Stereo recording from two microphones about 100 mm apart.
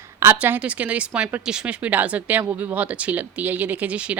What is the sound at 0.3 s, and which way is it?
Speech, 15° right (ahead or behind).